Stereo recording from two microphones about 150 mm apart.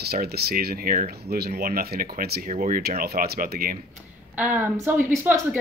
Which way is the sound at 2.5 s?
60° right (ahead or behind).